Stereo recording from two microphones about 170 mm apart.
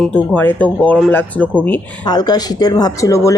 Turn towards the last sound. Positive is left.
turn(degrees=20)  # may be behind; listen again after turning